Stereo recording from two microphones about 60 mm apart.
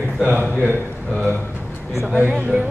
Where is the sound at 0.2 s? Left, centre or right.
Centre.